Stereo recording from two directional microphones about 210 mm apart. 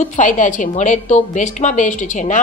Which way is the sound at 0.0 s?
35° left (ahead or behind).